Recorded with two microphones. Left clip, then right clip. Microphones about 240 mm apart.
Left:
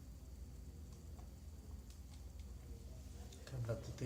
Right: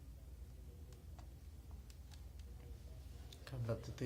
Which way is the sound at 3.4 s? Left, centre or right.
Right.